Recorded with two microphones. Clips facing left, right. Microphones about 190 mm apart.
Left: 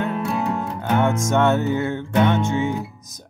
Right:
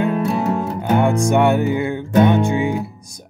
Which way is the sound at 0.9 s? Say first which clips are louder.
Right 3 dB; 15° right (ahead or behind).